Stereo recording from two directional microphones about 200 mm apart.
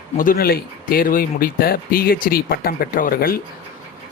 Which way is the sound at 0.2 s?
45° left (ahead or behind).